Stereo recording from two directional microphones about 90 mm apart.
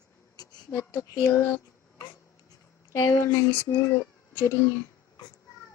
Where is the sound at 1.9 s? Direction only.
55° left (ahead or behind).